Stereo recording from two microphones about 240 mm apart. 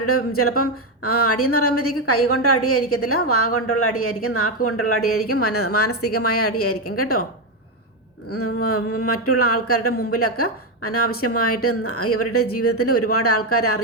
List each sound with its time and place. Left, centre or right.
0.0 s a woman's voice: left
8.3 s a woman's voice: left